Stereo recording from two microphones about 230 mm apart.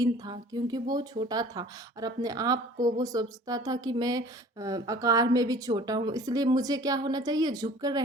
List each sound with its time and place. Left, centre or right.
0.0 s a woman's voice: centre